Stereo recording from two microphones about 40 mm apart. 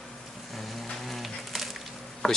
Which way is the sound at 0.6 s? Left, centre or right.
Centre.